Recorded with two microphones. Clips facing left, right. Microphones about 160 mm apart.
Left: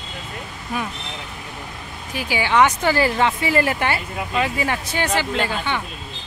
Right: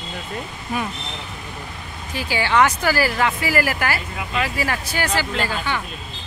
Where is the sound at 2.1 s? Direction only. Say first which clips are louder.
Even; 15° left (ahead or behind).